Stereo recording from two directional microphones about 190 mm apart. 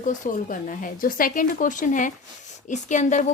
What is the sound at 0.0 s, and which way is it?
A woman's voice, 45° left (ahead or behind).